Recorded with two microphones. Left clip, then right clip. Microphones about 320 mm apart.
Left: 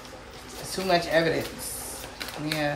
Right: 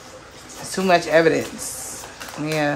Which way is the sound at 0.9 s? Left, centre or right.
Right.